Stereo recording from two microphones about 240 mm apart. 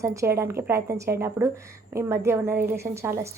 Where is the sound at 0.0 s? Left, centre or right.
Centre.